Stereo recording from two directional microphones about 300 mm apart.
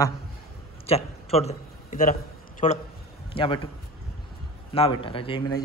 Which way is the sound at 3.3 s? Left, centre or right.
Centre.